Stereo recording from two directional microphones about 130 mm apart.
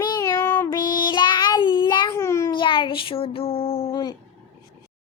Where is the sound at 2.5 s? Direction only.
40° left (ahead or behind).